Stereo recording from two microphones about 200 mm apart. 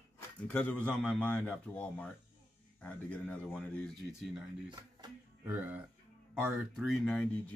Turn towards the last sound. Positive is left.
turn(degrees=5)  # may be behind; listen again after turning